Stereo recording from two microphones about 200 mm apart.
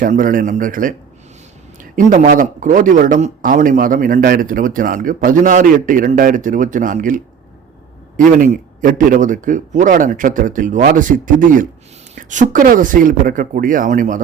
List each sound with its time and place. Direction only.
0.0 s a man's voice: 45° right (ahead or behind)
8.4 s speech: 40° right (ahead or behind)